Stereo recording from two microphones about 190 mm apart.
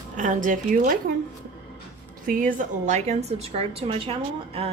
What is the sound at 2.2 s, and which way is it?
Speech, 45° right (ahead or behind).